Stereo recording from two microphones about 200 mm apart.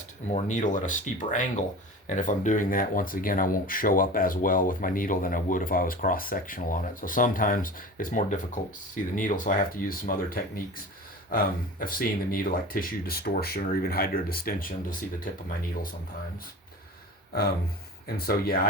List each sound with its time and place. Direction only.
0.3 s speech: 35° left (ahead or behind)
18.3 s speech: 50° left (ahead or behind)